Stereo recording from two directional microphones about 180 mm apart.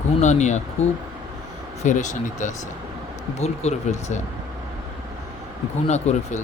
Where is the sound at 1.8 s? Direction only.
45° left (ahead or behind).